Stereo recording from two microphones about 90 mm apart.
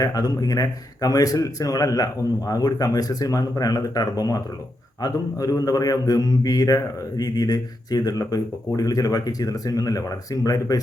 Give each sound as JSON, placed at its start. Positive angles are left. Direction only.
{"t": 0.0, "sound": "a man's voice", "side_deg": 45}